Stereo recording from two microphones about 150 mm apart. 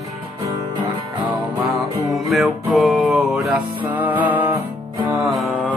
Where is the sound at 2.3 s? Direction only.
Centre (ahead or behind).